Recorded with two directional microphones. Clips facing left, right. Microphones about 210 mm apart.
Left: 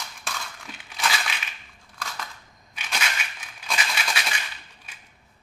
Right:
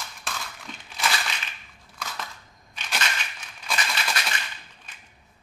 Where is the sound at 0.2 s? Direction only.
Centre (ahead or behind).